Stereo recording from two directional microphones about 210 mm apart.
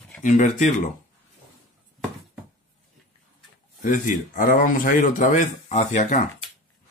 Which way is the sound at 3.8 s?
40° left (ahead or behind).